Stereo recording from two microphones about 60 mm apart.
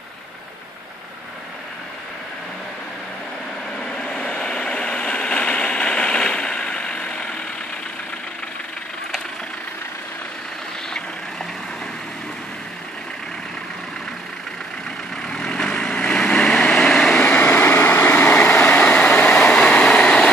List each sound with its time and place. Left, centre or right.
3.8 s train: centre
15.2 s vehicle: centre
17.2 s vehicle: left